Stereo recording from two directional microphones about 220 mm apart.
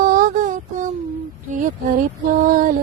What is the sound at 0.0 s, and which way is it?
Mantra, 40° right (ahead or behind).